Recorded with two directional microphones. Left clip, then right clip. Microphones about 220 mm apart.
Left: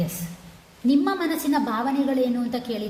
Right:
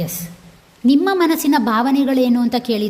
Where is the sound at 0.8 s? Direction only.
45° right (ahead or behind).